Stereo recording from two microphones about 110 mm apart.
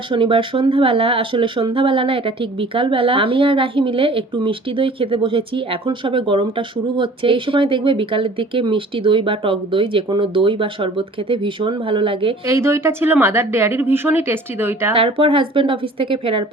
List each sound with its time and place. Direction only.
0.1 s speech: 50° right (ahead or behind)
12.5 s a woman's voice: 25° right (ahead or behind)
14.9 s speech: 55° right (ahead or behind)